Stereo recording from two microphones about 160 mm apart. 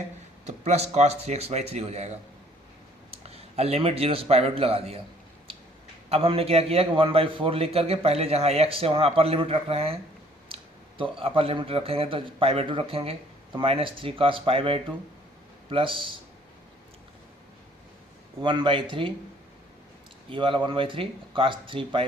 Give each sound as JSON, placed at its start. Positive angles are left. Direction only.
{"t": 0.4, "sound": "speech", "side_deg": -45}
{"t": 6.1, "sound": "speech", "side_deg": -40}
{"t": 18.4, "sound": "speech", "side_deg": -30}
{"t": 20.3, "sound": "speech", "side_deg": -30}